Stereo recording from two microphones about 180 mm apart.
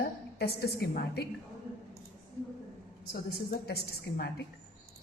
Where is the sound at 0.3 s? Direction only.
65° left (ahead or behind).